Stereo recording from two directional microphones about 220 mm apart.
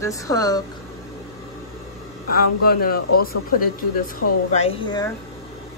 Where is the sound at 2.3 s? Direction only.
40° left (ahead or behind).